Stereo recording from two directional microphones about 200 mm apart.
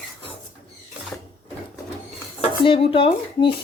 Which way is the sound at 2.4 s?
30° left (ahead or behind).